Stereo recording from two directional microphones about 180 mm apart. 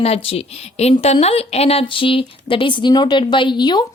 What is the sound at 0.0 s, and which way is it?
A woman's voice, 35° left (ahead or behind).